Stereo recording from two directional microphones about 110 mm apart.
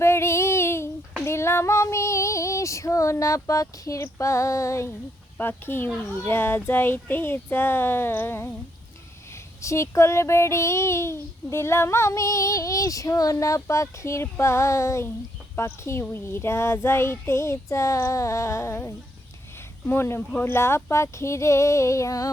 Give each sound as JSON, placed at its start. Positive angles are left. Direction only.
{"t": 0.0, "sound": "child singing", "side_deg": 25}
{"t": 1.2, "sound": "female singing", "side_deg": 25}
{"t": 5.4, "sound": "child singing", "side_deg": 20}
{"t": 9.6, "sound": "child singing", "side_deg": 25}